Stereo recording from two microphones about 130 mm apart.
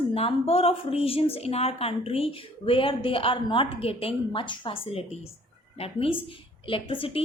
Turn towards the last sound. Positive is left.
turn(degrees=45)  # may be behind; listen again after turning